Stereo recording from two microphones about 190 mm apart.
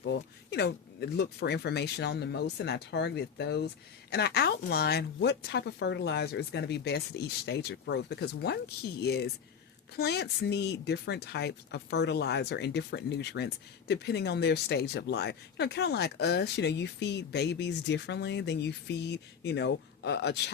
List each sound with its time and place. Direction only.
0.0 s speech: 65° left (ahead or behind)